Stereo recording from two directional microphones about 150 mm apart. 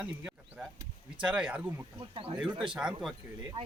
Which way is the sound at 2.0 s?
35° right (ahead or behind).